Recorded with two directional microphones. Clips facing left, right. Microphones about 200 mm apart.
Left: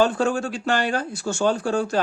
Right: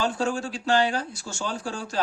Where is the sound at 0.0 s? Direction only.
55° left (ahead or behind).